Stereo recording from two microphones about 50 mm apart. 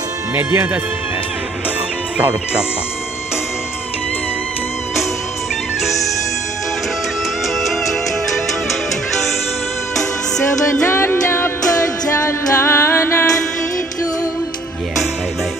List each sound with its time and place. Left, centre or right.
0.4 s speech: right
10.9 s music: left